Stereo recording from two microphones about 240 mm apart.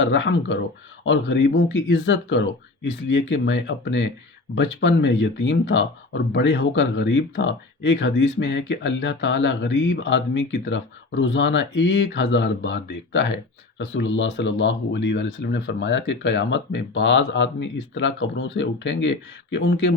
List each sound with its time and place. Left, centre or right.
0.0 s speech: left